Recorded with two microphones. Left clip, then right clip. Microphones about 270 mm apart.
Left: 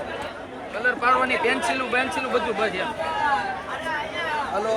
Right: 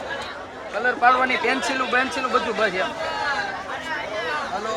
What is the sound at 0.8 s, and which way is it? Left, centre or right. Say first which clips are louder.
Speech: right 2 dB; right.